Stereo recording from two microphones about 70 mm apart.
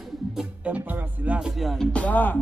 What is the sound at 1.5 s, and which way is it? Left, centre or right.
Music, centre.